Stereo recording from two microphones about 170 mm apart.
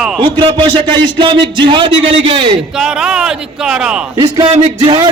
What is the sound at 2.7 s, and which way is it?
Speech, 5° right (ahead or behind).